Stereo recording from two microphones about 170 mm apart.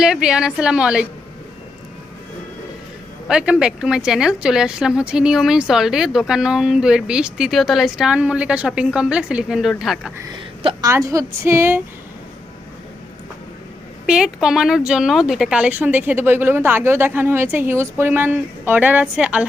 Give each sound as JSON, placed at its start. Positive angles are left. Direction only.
{"t": 0.0, "sound": "speech", "side_deg": -5}
{"t": 3.2, "sound": "speech", "side_deg": -5}
{"t": 10.6, "sound": "a woman's voice", "side_deg": -30}
{"t": 10.8, "sound": "a woman's voice", "side_deg": -20}
{"t": 14.1, "sound": "a woman's voice", "side_deg": -5}